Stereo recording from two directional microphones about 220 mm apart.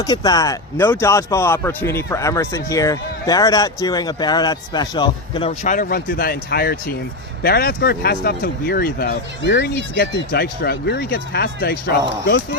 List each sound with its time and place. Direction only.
0.0 s speech: 15° left (ahead or behind); by 12.5 s 50° left (ahead or behind)